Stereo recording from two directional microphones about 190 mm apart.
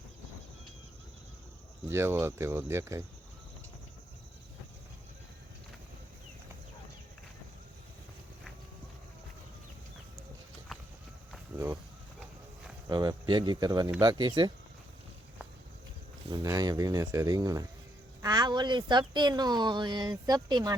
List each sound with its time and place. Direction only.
1.9 s speech: 10° right (ahead or behind)
11.5 s a sound: 15° right (ahead or behind)
12.9 s speech: 25° right (ahead or behind)
16.3 s speech: 20° right (ahead or behind)